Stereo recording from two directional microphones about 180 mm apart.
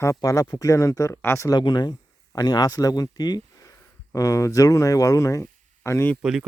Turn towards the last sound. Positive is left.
turn(degrees=-5)  # may be behind; listen again after turning